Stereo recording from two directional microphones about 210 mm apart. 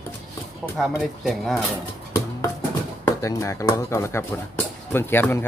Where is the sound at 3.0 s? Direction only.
15° left (ahead or behind).